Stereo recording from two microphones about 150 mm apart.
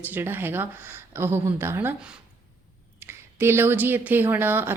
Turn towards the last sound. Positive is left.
turn(degrees=-15)  # may be behind; listen again after turning